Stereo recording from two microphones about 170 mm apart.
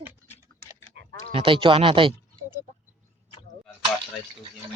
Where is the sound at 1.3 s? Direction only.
30° right (ahead or behind).